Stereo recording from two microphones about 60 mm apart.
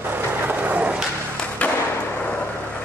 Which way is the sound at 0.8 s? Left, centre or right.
Centre.